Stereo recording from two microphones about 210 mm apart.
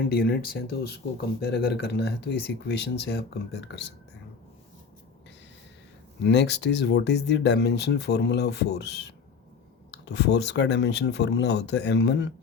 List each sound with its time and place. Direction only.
0.0 s speech: 45° left (ahead or behind)
6.2 s speech: 55° left (ahead or behind)